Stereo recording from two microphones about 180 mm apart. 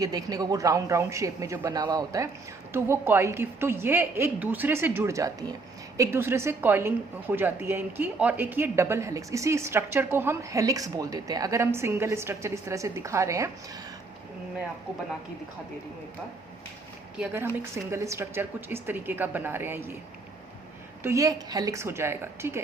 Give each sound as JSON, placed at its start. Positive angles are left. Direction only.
{"t": 0.0, "sound": "a woman's voice", "side_deg": -20}
{"t": 17.2, "sound": "a woman's voice", "side_deg": -10}
{"t": 21.0, "sound": "a woman's voice", "side_deg": -15}